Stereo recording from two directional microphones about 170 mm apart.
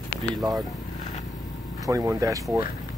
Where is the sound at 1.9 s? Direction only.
20° right (ahead or behind).